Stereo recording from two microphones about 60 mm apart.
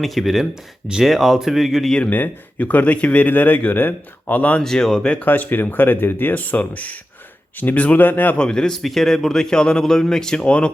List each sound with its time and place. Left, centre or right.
0.0 s speech: centre
2.0 s speech: left
4.6 s a man's voice: centre
5.2 s speech: left
8.4 s a man's voice: centre